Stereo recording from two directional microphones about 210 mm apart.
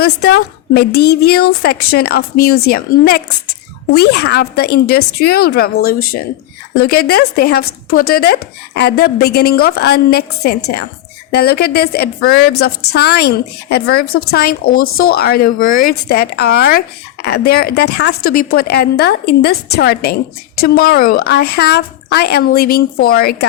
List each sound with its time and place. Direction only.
0.0 s speech: 50° left (ahead or behind)